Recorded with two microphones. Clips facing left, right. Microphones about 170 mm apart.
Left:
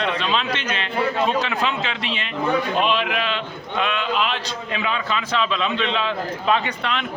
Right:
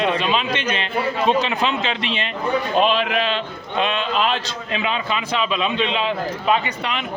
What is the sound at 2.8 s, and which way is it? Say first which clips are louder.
A man's voice: right 3 dB; 35° right (ahead or behind).